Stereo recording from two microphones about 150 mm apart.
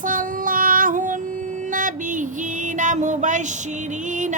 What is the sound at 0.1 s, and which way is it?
Female singing, 65° right (ahead or behind).